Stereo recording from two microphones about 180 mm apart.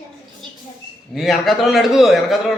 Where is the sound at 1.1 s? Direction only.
Centre (ahead or behind).